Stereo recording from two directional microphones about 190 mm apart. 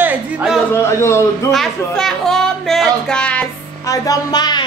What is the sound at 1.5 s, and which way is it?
Speech, centre (ahead or behind).